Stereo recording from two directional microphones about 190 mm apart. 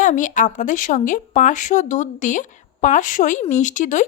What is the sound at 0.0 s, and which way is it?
Speech, 40° left (ahead or behind).